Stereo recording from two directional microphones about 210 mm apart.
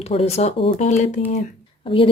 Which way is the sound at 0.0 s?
30° left (ahead or behind).